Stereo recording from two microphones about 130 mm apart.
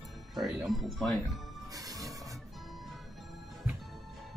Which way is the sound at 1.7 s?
25° right (ahead or behind).